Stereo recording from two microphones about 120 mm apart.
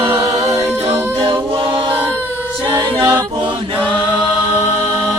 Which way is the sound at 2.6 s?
20° right (ahead or behind).